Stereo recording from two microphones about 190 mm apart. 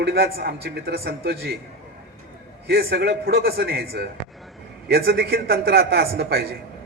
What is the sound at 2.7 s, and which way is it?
A man's voice, 55° right (ahead or behind).